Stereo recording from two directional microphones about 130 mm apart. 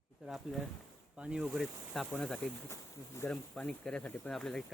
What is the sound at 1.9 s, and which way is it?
Speech, 5° left (ahead or behind).